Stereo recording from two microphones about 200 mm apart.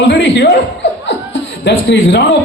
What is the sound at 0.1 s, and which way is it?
Speech, 60° left (ahead or behind).